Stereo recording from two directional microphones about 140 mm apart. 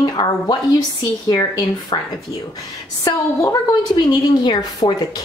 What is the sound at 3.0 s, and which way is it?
A woman's voice, 25° left (ahead or behind).